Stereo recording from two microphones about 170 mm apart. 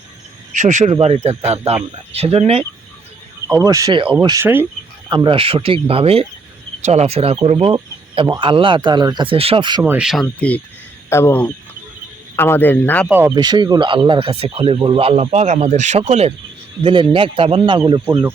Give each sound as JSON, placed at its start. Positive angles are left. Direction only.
{"t": 0.5, "sound": "speech", "side_deg": -45}
{"t": 3.4, "sound": "a man's voice", "side_deg": -20}
{"t": 5.0, "sound": "speech", "side_deg": -30}
{"t": 9.8, "sound": "speech", "side_deg": -10}
{"t": 10.1, "sound": "a man's voice", "side_deg": 5}
{"t": 13.1, "sound": "speech", "side_deg": -10}
{"t": 13.3, "sound": "speech", "side_deg": -25}
{"t": 16.8, "sound": "a man's voice", "side_deg": -30}